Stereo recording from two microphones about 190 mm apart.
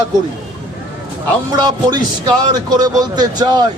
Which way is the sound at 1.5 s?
20° right (ahead or behind).